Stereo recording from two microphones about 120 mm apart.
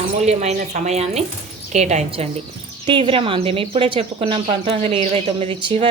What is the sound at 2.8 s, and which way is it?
Speech, 45° right (ahead or behind).